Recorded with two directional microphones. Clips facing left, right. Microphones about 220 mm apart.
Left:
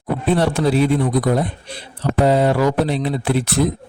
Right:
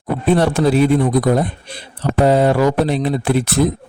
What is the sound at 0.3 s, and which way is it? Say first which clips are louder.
Speech: right 3 dB; 50° right (ahead or behind).